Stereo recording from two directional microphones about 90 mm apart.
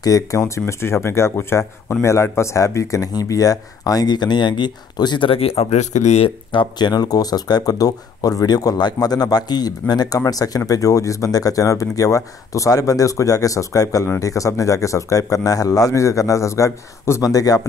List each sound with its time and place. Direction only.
0.0 s speech: 40° left (ahead or behind); by 5.3 s 55° left (ahead or behind)
6.2 s speech: 65° left (ahead or behind)
6.9 s speech: 45° left (ahead or behind)